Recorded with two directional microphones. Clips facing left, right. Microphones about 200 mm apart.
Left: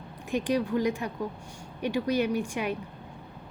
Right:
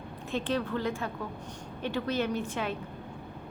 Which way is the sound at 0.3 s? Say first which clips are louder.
Left 4 dB; 15° left (ahead or behind).